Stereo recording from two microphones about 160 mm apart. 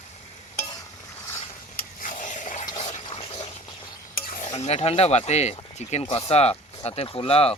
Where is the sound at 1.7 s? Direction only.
55° left (ahead or behind).